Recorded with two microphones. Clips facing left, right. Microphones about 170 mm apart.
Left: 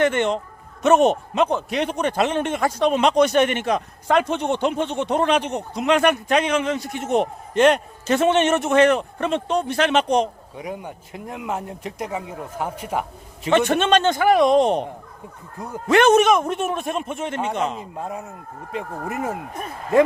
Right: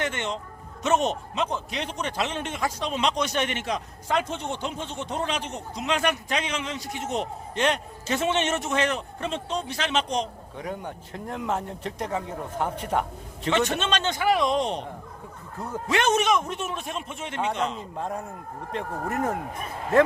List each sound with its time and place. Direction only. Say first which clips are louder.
0.0 s a man's voice: left 10 dB; 55° left (ahead or behind)
10.6 s speech: left 2 dB; 10° left (ahead or behind)
13.7 s a man's voice: left 9 dB; 55° left (ahead or behind)
15.5 s speech: left 1 dB; 15° left (ahead or behind)
15.9 s a man's voice: left 8 dB; 55° left (ahead or behind)
17.9 s speech: left 1 dB; 5° left (ahead or behind)